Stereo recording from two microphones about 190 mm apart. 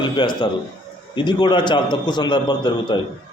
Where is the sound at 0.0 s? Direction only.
25° left (ahead or behind).